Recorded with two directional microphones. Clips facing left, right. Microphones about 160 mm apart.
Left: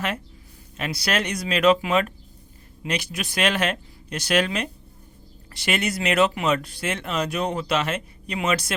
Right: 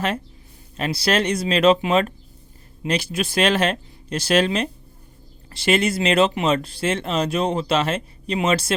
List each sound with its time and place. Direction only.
0.8 s speech: 30° right (ahead or behind)